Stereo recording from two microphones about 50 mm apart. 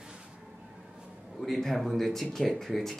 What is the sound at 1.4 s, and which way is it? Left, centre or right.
Speech, centre.